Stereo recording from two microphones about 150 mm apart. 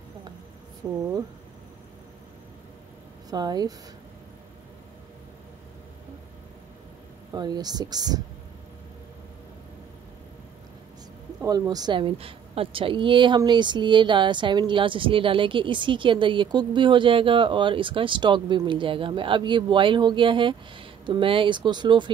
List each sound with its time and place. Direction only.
0.8 s speech: 15° right (ahead or behind)
3.3 s speech: 25° right (ahead or behind)
7.3 s speech: 25° right (ahead or behind)
11.4 s a woman's voice: 25° right (ahead or behind)